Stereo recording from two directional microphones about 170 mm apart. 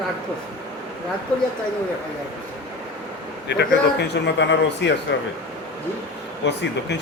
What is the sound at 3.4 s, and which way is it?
A man's voice, 75° left (ahead or behind).